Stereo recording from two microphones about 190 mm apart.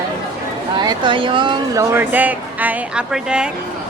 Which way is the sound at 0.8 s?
25° right (ahead or behind).